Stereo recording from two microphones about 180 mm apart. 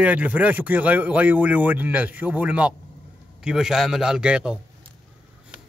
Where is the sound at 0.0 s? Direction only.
10° right (ahead or behind).